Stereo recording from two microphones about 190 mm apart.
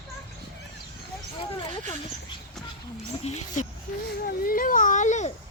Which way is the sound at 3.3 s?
35° left (ahead or behind).